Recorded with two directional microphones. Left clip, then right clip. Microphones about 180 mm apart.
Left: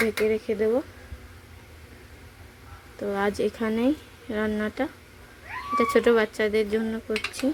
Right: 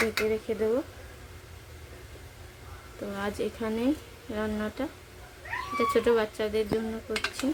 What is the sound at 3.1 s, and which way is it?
Speech, 35° left (ahead or behind).